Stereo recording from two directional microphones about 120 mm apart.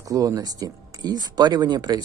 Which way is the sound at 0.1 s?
30° right (ahead or behind).